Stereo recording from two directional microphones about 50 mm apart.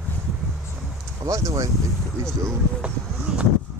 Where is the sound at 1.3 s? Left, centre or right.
Right.